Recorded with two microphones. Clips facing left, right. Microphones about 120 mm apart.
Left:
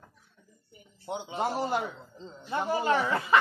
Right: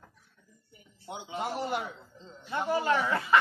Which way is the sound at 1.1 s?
35° left (ahead or behind).